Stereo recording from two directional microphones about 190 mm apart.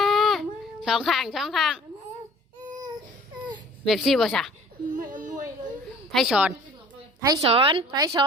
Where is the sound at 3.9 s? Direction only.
Centre (ahead or behind).